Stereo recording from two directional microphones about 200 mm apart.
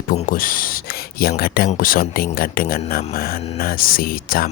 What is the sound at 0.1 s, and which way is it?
Speech, 45° left (ahead or behind).